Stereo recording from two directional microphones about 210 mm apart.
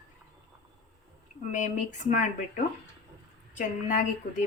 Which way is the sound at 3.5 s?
35° left (ahead or behind).